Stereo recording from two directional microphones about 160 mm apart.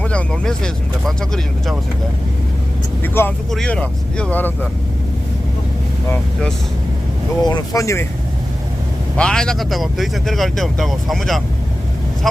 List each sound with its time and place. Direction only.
0.0 s speech: 5° left (ahead or behind)
3.0 s speech: 10° left (ahead or behind)
7.4 s speech: 25° left (ahead or behind)
9.1 s speech: 5° left (ahead or behind)